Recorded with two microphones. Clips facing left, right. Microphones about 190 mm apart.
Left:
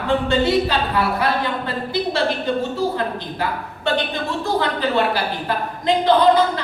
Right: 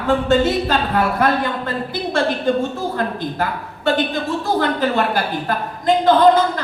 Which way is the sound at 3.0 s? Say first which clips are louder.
Right 2 dB; 50° right (ahead or behind).